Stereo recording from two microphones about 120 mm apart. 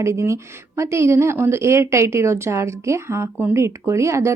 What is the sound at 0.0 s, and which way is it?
A woman's voice, 25° right (ahead or behind).